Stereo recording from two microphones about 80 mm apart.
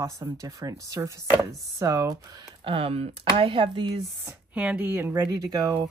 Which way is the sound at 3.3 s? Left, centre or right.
Right.